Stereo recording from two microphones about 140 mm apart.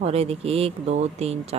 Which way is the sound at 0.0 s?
45° right (ahead or behind).